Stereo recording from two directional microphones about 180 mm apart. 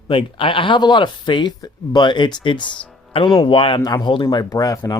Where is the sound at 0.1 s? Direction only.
30° left (ahead or behind).